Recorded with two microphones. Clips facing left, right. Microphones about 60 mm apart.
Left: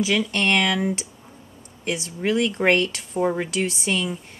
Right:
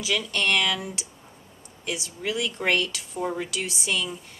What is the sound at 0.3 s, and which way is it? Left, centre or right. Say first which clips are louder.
Speech: left 3 dB; left.